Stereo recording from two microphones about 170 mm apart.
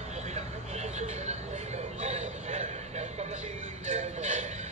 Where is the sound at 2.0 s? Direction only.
40° right (ahead or behind).